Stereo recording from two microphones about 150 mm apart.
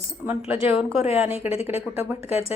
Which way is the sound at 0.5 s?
40° left (ahead or behind).